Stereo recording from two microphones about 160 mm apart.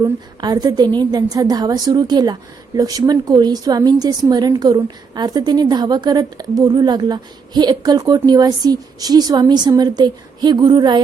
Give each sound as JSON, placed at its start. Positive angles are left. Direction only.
{"t": 0.0, "sound": "a woman's voice", "side_deg": -25}